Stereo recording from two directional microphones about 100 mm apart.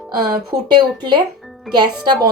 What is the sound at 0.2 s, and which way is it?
Speech, 45° right (ahead or behind).